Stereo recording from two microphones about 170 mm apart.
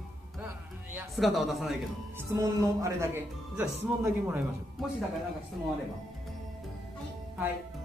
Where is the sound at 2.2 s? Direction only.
20° right (ahead or behind).